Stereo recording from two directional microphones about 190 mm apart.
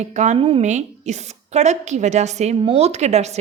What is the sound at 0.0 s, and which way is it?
A woman's voice, 40° right (ahead or behind).